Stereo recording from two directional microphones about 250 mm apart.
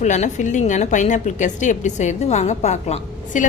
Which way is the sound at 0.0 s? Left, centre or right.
Left.